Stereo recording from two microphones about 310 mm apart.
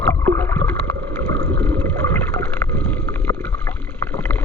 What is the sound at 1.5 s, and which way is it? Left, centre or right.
Water, centre.